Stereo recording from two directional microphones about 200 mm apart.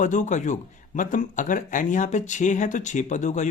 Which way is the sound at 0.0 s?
40° left (ahead or behind).